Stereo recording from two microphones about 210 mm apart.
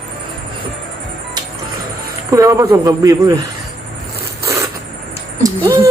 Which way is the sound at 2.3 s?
15° right (ahead or behind).